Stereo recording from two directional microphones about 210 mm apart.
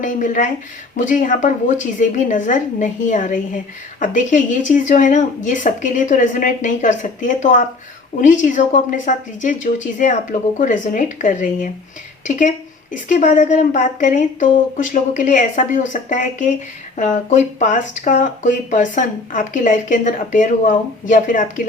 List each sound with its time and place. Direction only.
0.0 s speech: 35° left (ahead or behind)
12.9 s speech: 35° left (ahead or behind)